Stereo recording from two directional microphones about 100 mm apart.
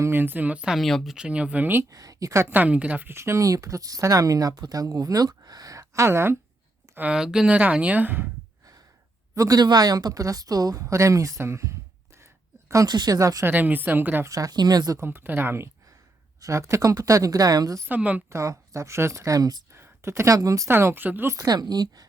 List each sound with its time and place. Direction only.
0.0 s speech: 20° right (ahead or behind); by 1.1 s centre (ahead or behind)
1.1 s speech: 10° right (ahead or behind)
1.8 s speech: 35° right (ahead or behind)
6.9 s speech: 10° right (ahead or behind)
9.3 s speech: 35° right (ahead or behind)
13.4 s speech: 15° right (ahead or behind)
14.3 s speech: 35° right (ahead or behind)
14.9 s speech: 25° right (ahead or behind)
17.8 s speech: 15° right (ahead or behind)
18.3 s speech: 30° right (ahead or behind)
19.7 s speech: 25° right (ahead or behind)
20.7 s speech: 25° right (ahead or behind)
21.3 s speech: 40° right (ahead or behind)